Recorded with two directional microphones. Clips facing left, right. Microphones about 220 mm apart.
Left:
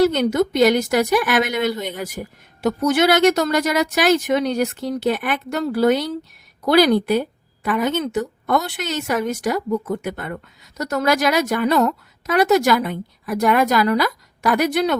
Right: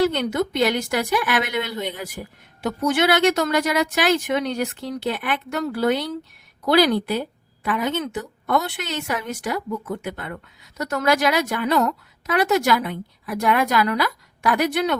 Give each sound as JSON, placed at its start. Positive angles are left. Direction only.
{"t": 0.0, "sound": "a woman's voice", "side_deg": 40}